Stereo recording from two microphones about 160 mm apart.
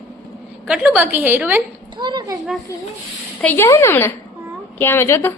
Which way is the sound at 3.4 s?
15° left (ahead or behind).